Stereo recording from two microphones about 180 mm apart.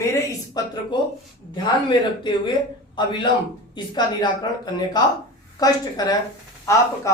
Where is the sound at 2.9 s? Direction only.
25° left (ahead or behind).